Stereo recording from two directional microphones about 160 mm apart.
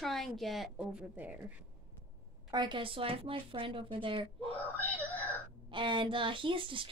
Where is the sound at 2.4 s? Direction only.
25° right (ahead or behind).